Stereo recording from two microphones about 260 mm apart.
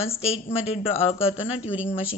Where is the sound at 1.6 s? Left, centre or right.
Centre.